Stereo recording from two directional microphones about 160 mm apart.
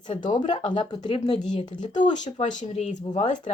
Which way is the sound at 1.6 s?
45° left (ahead or behind).